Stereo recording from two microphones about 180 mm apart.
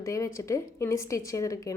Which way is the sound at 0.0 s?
15° left (ahead or behind).